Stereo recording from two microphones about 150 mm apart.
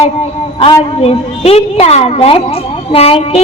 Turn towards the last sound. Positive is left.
turn(degrees=40)  # may be behind; listen again after turning